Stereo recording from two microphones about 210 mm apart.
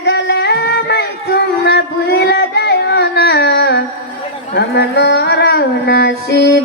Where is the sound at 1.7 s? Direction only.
55° left (ahead or behind).